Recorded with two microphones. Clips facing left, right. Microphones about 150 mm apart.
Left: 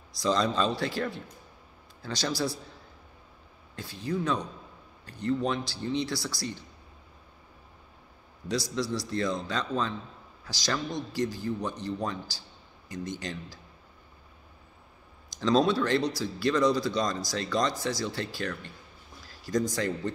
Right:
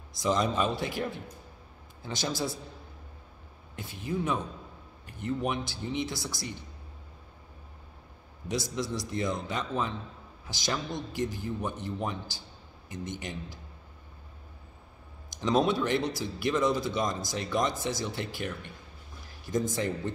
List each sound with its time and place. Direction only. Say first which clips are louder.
0.2 s a man's voice: left 1 dB; 20° right (ahead or behind)
3.7 s a man's voice: left 2 dB; 20° right (ahead or behind)
8.5 s a man's voice: left 2 dB; 20° right (ahead or behind)
15.3 s a man's voice: left 2 dB; 20° right (ahead or behind)